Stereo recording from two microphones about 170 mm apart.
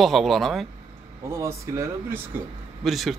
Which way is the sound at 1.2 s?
15° right (ahead or behind).